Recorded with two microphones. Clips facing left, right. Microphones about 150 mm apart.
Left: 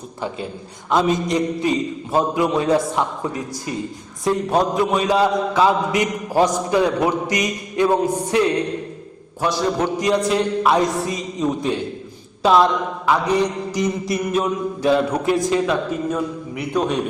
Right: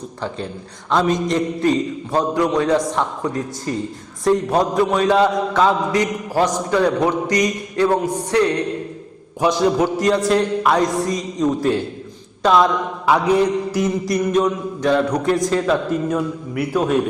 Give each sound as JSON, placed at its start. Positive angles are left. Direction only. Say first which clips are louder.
{"t": 0.9, "sound": "a man's voice", "louder": "even", "side_deg": 10}
{"t": 2.3, "sound": "a man's voice", "louder": "right 1 dB", "side_deg": 20}
{"t": 2.6, "sound": "a man's voice", "louder": "even", "side_deg": 5}
{"t": 4.2, "sound": "a man's voice", "louder": "right 2 dB", "side_deg": 0}
{"t": 5.9, "sound": "a man's voice", "louder": "right 1 dB", "side_deg": 15}
{"t": 9.4, "sound": "a sound", "louder": "right 4 dB", "side_deg": -10}
{"t": 10.0, "sound": "a man's voice", "louder": "even", "side_deg": 0}
{"t": 13.1, "sound": "a sound", "louder": "right 3 dB", "side_deg": -10}
{"t": 14.1, "sound": "a man's voice", "louder": "right 3 dB", "side_deg": 5}